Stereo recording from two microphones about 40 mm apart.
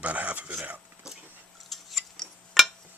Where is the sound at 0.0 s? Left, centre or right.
Right.